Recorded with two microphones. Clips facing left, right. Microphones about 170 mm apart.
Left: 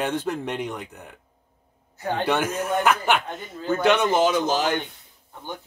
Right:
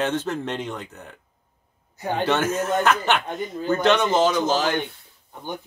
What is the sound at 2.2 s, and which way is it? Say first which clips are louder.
Speech: right 2 dB; 15° left (ahead or behind).